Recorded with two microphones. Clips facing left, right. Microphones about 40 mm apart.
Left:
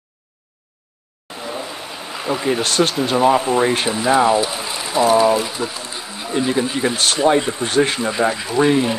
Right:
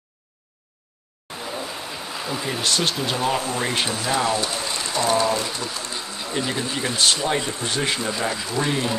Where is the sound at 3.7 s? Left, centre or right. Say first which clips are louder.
Left 7 dB; left.